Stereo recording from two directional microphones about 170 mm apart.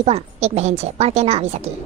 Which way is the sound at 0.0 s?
40° right (ahead or behind).